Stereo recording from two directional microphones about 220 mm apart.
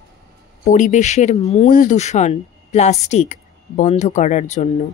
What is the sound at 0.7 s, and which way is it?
A woman's voice, 35° left (ahead or behind).